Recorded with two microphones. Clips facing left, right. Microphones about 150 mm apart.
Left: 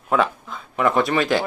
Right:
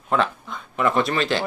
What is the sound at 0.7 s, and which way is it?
Speech, 15° left (ahead or behind).